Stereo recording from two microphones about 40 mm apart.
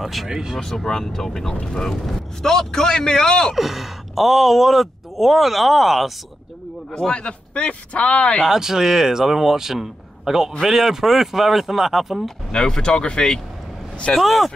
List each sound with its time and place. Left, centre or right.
0.0 s speech: centre
0.3 s a man's voice: centre
0.6 s a man's voice: centre
3.5 s speech: centre
6.9 s a man's voice: centre
8.5 s a man's voice: centre
12.4 s a man's voice: left
14.2 s speech: centre